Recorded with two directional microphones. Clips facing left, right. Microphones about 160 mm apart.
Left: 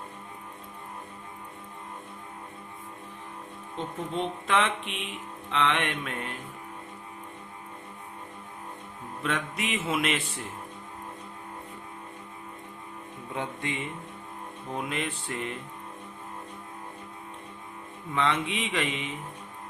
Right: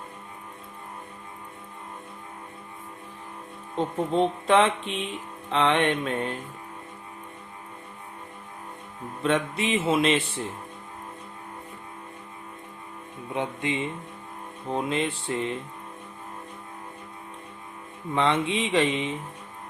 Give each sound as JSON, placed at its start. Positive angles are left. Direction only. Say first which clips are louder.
{"t": 3.8, "sound": "speech", "louder": "right 8 dB", "side_deg": -35}
{"t": 9.2, "sound": "music", "louder": "right 7 dB", "side_deg": -30}
{"t": 13.3, "sound": "music", "louder": "right 5 dB", "side_deg": -20}
{"t": 18.1, "sound": "music", "louder": "right 4 dB", "side_deg": -30}